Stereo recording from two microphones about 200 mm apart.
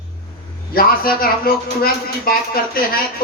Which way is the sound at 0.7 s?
45° left (ahead or behind).